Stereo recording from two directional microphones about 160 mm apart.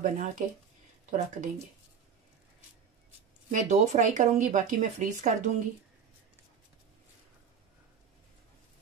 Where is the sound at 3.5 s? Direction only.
50° right (ahead or behind).